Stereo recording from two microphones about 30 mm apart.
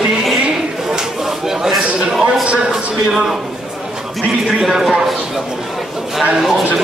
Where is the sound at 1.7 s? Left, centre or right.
Centre.